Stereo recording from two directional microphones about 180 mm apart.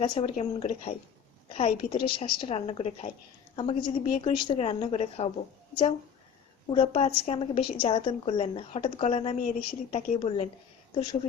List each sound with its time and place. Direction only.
0.0 s a woman's voice: 35° left (ahead or behind)
6.7 s a woman's voice: 35° left (ahead or behind)